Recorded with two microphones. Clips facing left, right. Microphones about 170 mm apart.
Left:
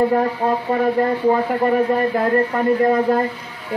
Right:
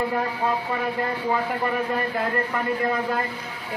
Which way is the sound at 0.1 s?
45° left (ahead or behind).